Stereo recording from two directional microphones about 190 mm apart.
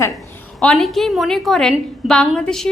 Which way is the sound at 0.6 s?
5° left (ahead or behind).